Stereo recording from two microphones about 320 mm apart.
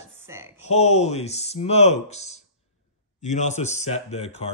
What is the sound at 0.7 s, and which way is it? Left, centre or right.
Speech, left.